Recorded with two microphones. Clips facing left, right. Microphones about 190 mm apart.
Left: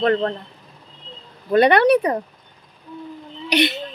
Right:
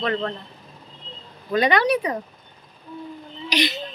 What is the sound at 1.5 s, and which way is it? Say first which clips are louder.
Speech: left 6 dB; 60° left (ahead or behind).